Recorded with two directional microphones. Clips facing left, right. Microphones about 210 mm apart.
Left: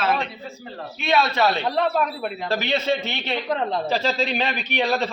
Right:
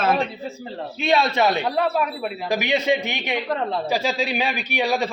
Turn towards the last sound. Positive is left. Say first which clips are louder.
# even
turn(degrees=-10)  # may be behind; listen again after turning